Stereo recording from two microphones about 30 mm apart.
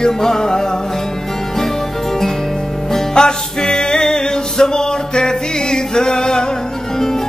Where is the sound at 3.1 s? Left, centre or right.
Left.